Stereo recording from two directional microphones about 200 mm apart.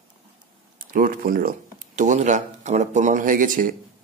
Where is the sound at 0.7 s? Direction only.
45° right (ahead or behind).